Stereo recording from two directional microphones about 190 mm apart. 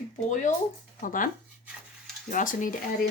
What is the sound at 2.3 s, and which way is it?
Speech, 45° left (ahead or behind).